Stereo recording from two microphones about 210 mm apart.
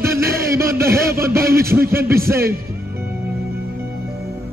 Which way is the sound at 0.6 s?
15° right (ahead or behind).